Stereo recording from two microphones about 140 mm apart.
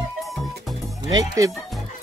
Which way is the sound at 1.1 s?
25° right (ahead or behind).